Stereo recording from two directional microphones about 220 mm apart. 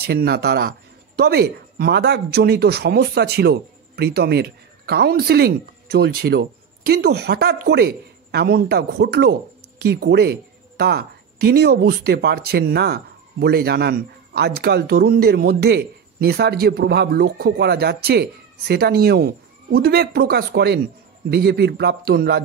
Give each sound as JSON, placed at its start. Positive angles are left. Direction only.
{"t": 0.0, "sound": "speech", "side_deg": -45}